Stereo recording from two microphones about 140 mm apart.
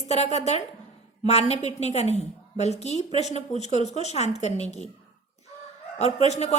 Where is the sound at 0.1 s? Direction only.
50° left (ahead or behind).